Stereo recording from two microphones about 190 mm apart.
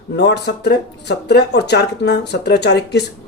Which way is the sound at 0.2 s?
60° left (ahead or behind).